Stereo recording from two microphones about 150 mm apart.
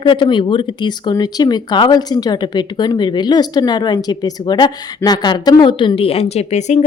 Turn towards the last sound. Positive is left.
turn(degrees=50)  # may be behind; listen again after turning